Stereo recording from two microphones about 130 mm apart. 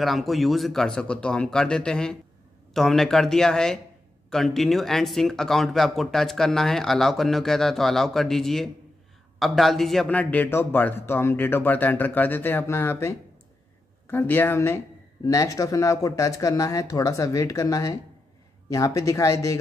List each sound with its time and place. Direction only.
0.0 s a man's voice: centre (ahead or behind); by 19.6 s 25° left (ahead or behind)